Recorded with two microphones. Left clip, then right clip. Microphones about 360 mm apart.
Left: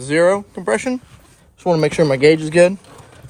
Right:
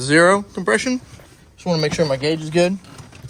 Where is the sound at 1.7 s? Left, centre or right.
Centre.